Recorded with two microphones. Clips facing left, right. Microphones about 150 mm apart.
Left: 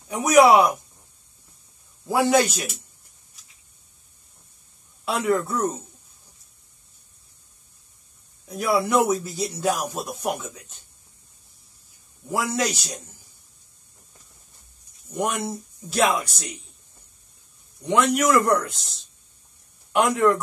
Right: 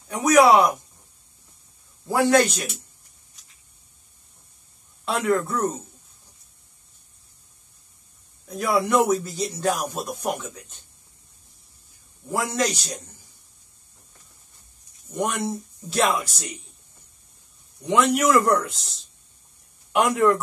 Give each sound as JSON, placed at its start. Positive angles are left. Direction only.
{"t": 0.1, "sound": "speech", "side_deg": 10}
{"t": 2.0, "sound": "speech", "side_deg": 10}
{"t": 5.0, "sound": "speech", "side_deg": 5}
{"t": 8.5, "sound": "speech", "side_deg": 5}
{"t": 12.3, "sound": "speech", "side_deg": 5}
{"t": 15.1, "sound": "speech", "side_deg": 5}
{"t": 17.8, "sound": "speech", "side_deg": 0}